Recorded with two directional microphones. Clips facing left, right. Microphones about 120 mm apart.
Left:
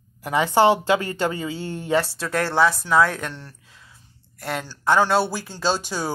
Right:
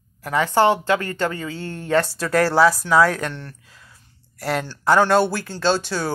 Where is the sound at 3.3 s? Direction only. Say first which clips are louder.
Right 4 dB; 5° left (ahead or behind).